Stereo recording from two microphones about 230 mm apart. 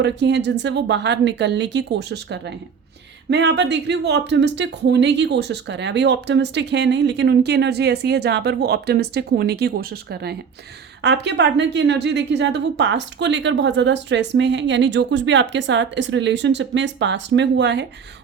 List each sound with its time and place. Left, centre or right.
0.0 s speech: right